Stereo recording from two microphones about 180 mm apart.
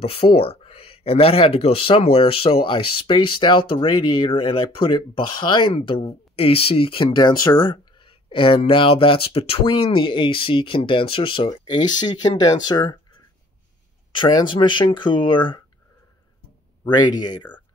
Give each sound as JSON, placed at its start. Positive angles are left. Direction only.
{"t": 0.0, "sound": "speech", "side_deg": 35}
{"t": 14.1, "sound": "speech", "side_deg": 25}
{"t": 16.8, "sound": "speech", "side_deg": 25}